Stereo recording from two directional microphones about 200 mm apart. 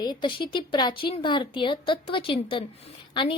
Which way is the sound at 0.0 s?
20° left (ahead or behind).